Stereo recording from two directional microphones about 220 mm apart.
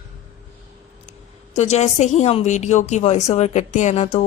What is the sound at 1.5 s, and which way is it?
A woman's voice, 30° left (ahead or behind).